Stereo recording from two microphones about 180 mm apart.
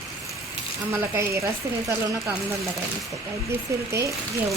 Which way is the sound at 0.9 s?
15° right (ahead or behind).